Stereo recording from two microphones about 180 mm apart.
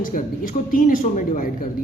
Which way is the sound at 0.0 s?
50° left (ahead or behind).